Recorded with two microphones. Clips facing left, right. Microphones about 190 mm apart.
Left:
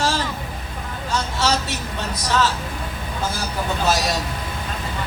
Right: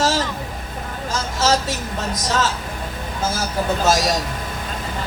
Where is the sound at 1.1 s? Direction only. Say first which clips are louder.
Right 2 dB; 45° right (ahead or behind).